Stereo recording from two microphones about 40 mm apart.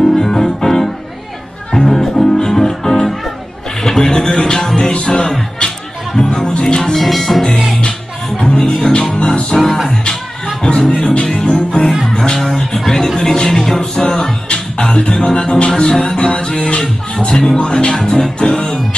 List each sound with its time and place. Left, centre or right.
0.0 s piano: centre
1.7 s music: centre
6.3 s speech: left; by 7.7 s centre
8.5 s speech: left
10.0 s music: centre
12.1 s speech: centre
14.2 s music: centre